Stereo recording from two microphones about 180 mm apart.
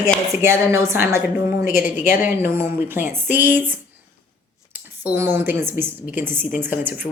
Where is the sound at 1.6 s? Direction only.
50° left (ahead or behind).